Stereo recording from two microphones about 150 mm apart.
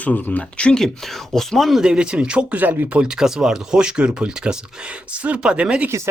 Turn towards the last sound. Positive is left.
turn(degrees=-5)  # may be behind; listen again after turning